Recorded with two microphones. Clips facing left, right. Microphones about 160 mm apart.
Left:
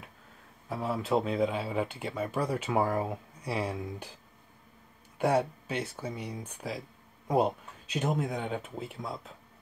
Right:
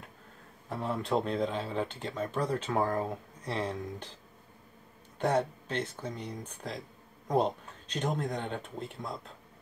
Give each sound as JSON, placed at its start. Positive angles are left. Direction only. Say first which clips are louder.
{"t": 0.7, "sound": "speech", "louder": "left 2 dB", "side_deg": 5}
{"t": 5.2, "sound": "speech", "louder": "left 2 dB", "side_deg": 10}